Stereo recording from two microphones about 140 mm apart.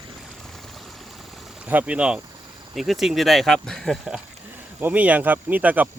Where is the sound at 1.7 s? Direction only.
10° right (ahead or behind).